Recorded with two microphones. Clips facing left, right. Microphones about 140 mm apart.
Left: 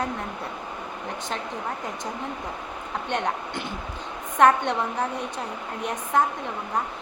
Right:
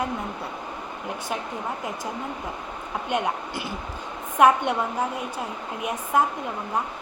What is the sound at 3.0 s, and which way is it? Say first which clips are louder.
A woman's voice: right 2 dB; 10° right (ahead or behind).